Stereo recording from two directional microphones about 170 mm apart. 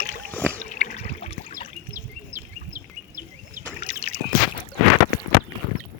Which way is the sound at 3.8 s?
40° left (ahead or behind).